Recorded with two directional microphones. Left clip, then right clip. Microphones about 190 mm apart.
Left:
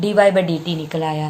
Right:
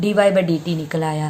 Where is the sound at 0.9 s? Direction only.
40° right (ahead or behind).